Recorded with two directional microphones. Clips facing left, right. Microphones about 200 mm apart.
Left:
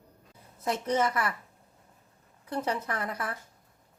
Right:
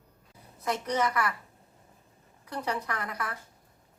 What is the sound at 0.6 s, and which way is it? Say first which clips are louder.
Speech: left 1 dB; 25° left (ahead or behind).